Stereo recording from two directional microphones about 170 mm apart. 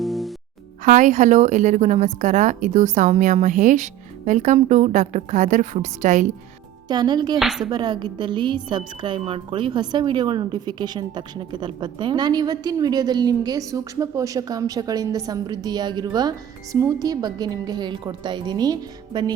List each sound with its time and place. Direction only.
0.0 s music: centre (ahead or behind)
0.9 s a woman's voice: 45° right (ahead or behind)
6.8 s a woman's voice: 25° right (ahead or behind)
7.3 s speech: centre (ahead or behind)
7.7 s a woman's voice: 25° right (ahead or behind)